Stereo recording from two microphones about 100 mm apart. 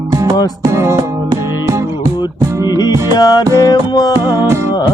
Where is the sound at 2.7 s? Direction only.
40° left (ahead or behind).